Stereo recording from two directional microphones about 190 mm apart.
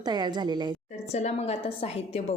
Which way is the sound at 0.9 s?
35° left (ahead or behind).